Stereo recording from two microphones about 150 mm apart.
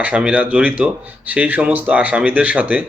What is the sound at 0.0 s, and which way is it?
Speech, 10° right (ahead or behind).